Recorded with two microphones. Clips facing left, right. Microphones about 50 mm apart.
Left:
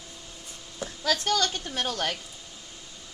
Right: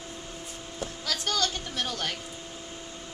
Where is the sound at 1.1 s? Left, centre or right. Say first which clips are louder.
Left 4 dB; left.